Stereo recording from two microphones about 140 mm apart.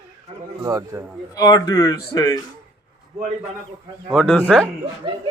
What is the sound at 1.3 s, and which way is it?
Speech, 25° left (ahead or behind).